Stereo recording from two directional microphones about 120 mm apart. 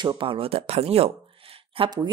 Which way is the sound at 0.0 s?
45° right (ahead or behind).